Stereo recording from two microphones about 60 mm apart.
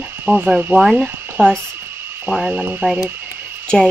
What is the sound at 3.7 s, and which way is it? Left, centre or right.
Speech, centre.